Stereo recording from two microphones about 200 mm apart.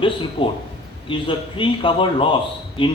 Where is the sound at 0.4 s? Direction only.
30° left (ahead or behind).